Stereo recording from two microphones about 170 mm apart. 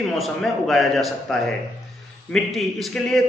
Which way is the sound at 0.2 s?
Centre (ahead or behind).